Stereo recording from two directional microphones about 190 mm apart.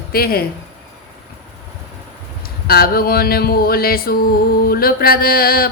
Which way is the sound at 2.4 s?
50° left (ahead or behind).